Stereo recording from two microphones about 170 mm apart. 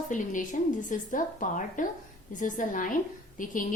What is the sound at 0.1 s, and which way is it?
A woman's voice, 45° left (ahead or behind).